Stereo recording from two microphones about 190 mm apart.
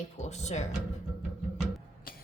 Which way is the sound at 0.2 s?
35° left (ahead or behind).